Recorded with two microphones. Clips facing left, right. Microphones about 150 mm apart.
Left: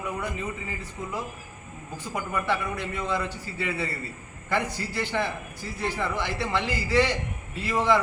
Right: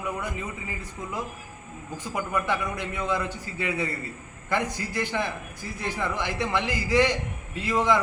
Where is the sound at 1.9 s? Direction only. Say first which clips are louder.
Right 2 dB; 15° right (ahead or behind).